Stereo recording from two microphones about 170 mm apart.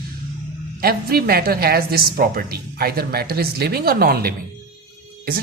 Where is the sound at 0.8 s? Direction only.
65° right (ahead or behind).